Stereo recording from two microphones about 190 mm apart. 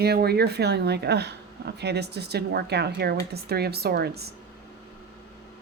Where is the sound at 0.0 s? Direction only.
55° right (ahead or behind).